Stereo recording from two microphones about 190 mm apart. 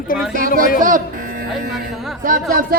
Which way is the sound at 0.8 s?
45° right (ahead or behind).